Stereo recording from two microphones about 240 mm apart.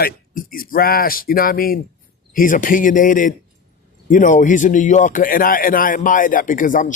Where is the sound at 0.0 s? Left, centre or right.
Left.